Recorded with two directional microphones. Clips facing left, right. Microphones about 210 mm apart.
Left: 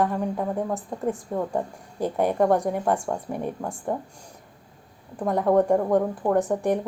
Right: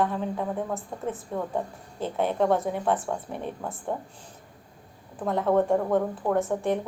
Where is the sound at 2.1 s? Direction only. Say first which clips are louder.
Left 3 dB; 15° left (ahead or behind).